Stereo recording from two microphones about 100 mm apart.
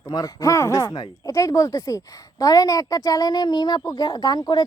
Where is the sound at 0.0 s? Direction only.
35° left (ahead or behind).